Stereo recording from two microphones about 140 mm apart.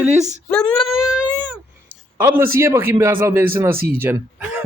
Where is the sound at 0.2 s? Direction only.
55° right (ahead or behind).